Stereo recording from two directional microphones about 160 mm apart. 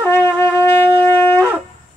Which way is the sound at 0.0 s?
15° left (ahead or behind).